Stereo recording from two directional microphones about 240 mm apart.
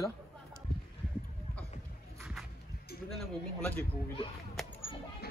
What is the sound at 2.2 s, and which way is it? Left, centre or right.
Music, centre.